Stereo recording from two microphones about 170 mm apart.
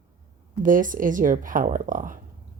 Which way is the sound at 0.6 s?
50° right (ahead or behind).